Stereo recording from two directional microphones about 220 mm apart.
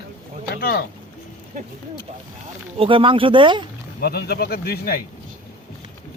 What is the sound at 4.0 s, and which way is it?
Speech, 45° left (ahead or behind).